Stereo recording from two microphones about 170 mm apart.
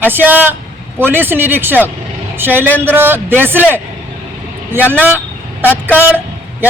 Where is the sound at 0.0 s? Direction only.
10° right (ahead or behind).